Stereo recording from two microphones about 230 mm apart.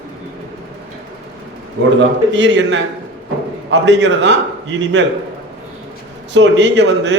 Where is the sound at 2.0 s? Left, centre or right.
Right.